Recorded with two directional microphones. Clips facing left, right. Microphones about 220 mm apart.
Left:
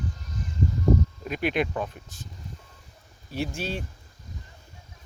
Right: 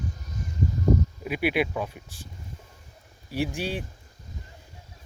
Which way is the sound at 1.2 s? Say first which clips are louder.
Right 1 dB; 10° right (ahead or behind).